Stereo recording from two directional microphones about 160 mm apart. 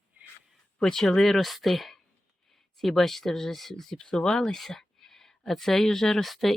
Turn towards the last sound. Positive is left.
turn(degrees=0)  # may be behind; listen again after turning